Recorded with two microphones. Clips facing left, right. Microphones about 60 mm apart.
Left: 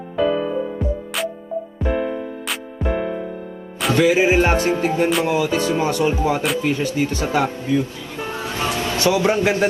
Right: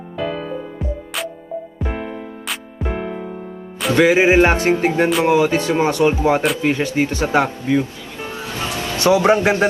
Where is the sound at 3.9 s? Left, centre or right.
Right.